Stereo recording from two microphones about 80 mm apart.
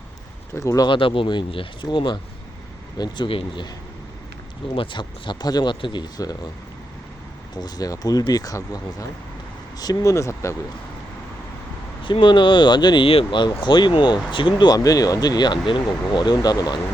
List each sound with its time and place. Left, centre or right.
0.5 s speech: left
0.9 s speech: left
4.8 s speech: left
5.8 s speech: left
7.5 s speech: left
12.0 s speech: left